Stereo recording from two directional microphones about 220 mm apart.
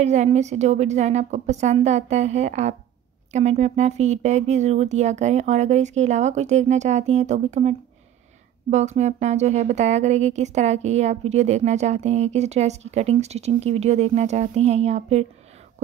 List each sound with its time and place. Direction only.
0.0 s a woman's voice: 30° right (ahead or behind)